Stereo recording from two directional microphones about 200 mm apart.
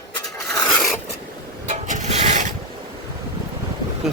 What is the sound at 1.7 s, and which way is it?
Pulleys, 35° right (ahead or behind).